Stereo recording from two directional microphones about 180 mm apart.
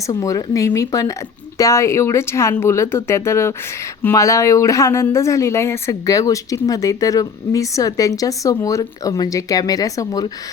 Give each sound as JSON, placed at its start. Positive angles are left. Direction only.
{"t": 0.1, "sound": "speech", "side_deg": 20}